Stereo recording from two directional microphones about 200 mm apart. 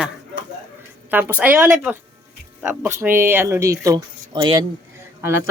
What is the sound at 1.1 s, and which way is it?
Speech, 10° right (ahead or behind).